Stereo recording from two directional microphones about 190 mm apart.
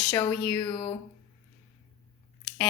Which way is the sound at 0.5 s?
30° left (ahead or behind).